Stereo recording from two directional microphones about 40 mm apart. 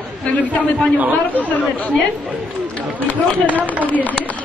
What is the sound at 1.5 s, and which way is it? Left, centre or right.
Speech, left.